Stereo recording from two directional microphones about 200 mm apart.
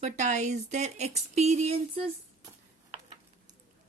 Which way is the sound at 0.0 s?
35° right (ahead or behind).